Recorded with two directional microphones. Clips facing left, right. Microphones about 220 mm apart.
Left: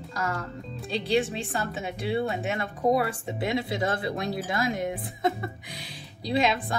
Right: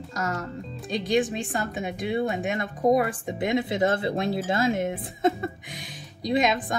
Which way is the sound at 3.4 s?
20° right (ahead or behind).